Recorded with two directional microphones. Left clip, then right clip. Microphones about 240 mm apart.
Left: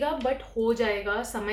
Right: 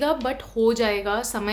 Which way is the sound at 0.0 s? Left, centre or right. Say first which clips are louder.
Right 3 dB; right.